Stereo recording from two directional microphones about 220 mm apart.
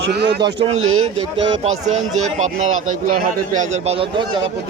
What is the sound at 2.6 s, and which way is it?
Speech, 70° right (ahead or behind).